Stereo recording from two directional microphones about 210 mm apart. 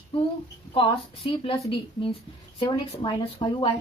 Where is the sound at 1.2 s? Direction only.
25° left (ahead or behind).